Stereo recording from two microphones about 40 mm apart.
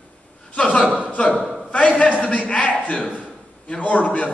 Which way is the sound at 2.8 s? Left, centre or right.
Left.